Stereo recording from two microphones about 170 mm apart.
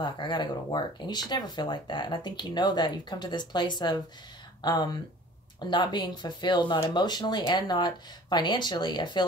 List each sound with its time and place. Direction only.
0.0 s speech: 25° left (ahead or behind)